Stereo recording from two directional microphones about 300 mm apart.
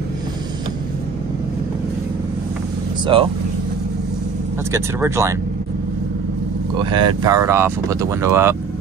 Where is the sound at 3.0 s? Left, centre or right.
Centre.